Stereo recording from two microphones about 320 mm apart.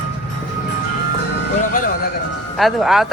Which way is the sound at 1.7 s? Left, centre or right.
Left.